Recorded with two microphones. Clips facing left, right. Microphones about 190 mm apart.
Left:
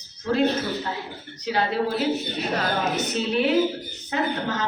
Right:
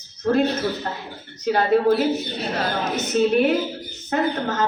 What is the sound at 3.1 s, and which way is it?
A man's voice, 50° right (ahead or behind).